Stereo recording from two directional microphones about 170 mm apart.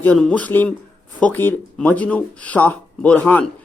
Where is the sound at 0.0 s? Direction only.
5° left (ahead or behind).